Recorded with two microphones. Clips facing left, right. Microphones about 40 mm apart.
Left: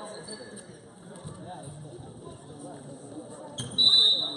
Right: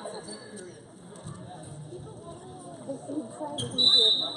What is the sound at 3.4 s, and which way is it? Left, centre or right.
Basketball bounce, centre.